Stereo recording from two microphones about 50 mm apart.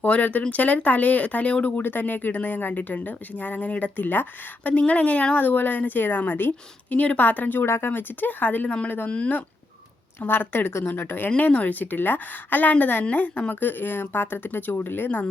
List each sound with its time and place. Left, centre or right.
0.0 s speech: left
7.6 s speech: left
10.2 s speech: left
11.3 s speech: left